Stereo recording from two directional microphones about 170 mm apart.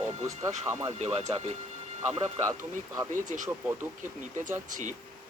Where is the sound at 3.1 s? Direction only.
50° right (ahead or behind).